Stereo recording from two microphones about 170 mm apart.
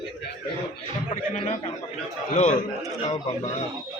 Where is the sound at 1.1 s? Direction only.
45° left (ahead or behind).